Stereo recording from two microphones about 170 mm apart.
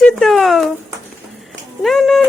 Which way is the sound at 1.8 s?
Centre (ahead or behind).